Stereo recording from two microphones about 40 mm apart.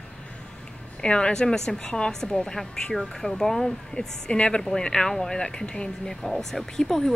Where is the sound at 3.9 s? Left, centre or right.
Left.